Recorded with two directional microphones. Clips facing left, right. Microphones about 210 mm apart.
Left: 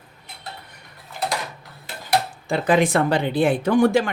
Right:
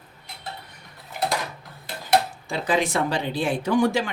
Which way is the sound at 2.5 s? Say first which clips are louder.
Left 6 dB; 55° left (ahead or behind).